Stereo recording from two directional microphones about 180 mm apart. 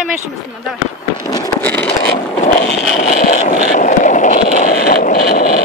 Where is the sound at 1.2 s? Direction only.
20° left (ahead or behind).